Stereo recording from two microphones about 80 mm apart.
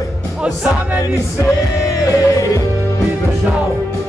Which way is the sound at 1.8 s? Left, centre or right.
Left.